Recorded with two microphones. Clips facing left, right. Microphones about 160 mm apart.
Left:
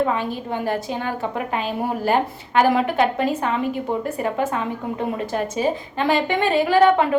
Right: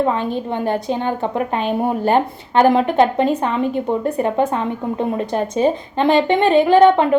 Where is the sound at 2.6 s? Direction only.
25° right (ahead or behind).